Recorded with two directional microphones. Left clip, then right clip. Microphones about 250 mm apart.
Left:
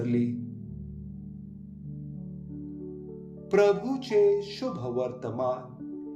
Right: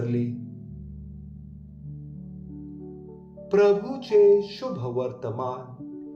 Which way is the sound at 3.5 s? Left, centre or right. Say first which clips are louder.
Right 3 dB; left.